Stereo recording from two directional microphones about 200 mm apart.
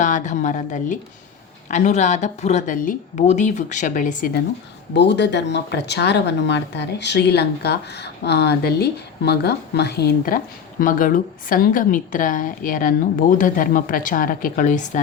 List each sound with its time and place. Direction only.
0.0 s a woman's voice: 40° left (ahead or behind)
4.9 s speech: 60° left (ahead or behind); by 15.0 s 40° left (ahead or behind)